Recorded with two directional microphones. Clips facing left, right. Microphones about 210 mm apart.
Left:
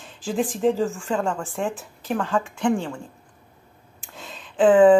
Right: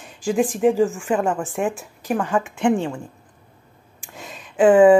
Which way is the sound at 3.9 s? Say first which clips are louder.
Right 2 dB; 10° right (ahead or behind).